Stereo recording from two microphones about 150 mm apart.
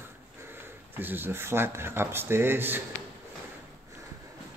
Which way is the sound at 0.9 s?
15° right (ahead or behind).